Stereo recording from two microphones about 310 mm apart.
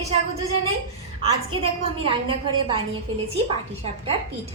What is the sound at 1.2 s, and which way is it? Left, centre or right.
Speech, centre.